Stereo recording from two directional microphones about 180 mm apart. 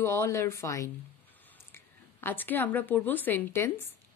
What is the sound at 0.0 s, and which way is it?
A woman's voice, 15° left (ahead or behind).